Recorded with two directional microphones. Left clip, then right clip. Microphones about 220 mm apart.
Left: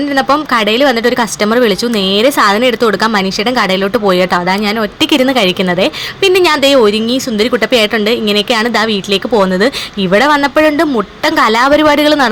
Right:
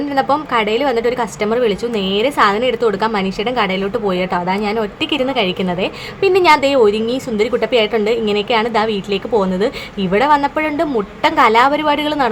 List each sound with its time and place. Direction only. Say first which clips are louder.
0.2 s speech: left 4 dB; 25° left (ahead or behind)
11.9 s a woman's voice: left 7 dB; 60° left (ahead or behind)